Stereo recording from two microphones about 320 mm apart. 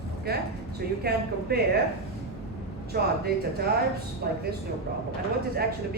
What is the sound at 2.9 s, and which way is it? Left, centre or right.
Speech, right.